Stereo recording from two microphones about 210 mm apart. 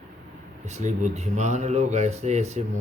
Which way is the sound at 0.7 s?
35° right (ahead or behind).